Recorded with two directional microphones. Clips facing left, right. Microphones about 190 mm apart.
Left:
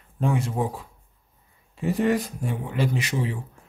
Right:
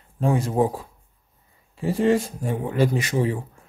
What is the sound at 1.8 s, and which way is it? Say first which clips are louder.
Speech: right 3 dB; 30° right (ahead or behind).